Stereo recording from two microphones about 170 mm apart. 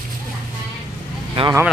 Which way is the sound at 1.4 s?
35° right (ahead or behind).